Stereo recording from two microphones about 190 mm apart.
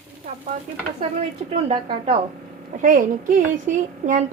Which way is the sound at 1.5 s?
30° right (ahead or behind).